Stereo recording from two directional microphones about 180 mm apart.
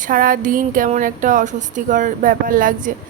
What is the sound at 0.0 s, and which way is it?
A woman's voice, 50° right (ahead or behind).